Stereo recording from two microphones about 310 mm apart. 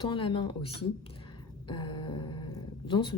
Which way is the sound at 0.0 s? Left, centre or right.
Centre.